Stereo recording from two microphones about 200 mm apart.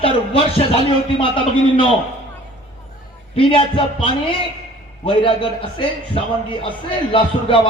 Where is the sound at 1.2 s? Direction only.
25° left (ahead or behind).